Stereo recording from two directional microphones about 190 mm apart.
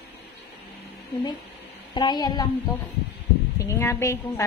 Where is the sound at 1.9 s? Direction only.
20° left (ahead or behind).